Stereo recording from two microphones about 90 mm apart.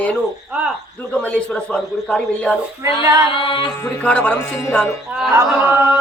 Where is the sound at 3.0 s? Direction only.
30° right (ahead or behind).